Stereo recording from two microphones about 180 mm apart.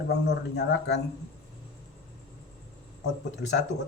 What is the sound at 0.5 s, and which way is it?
Speech, 70° left (ahead or behind).